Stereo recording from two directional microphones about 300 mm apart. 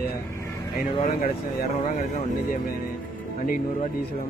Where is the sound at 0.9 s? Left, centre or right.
Left.